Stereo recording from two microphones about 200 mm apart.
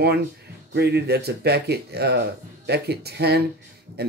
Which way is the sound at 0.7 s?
55° right (ahead or behind).